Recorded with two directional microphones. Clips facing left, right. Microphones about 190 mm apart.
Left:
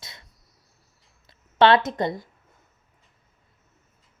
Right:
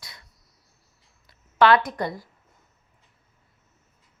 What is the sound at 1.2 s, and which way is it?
Speech, 25° left (ahead or behind).